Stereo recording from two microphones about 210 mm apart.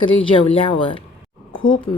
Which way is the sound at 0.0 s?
25° left (ahead or behind).